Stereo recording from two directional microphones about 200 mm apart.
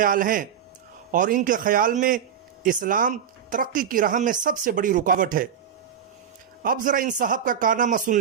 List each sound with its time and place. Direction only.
0.0 s speech: 45° right (ahead or behind)
6.6 s a man's voice: 45° right (ahead or behind)